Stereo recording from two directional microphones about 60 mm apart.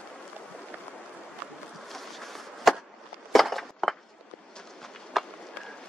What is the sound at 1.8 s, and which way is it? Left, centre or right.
Chop, centre.